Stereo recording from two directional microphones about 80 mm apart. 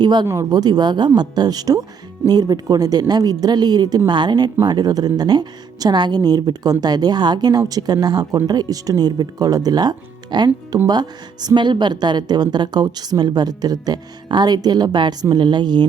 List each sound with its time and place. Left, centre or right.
0.0 s a woman's voice: right